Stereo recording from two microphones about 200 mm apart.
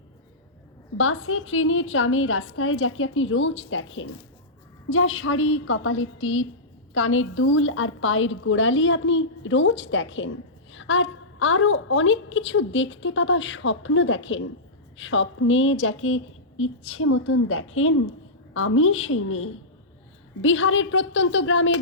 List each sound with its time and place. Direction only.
0.9 s a woman's voice: 90° left
4.9 s a woman's voice: 90° left
20.4 s a woman's voice: 75° left (ahead or behind)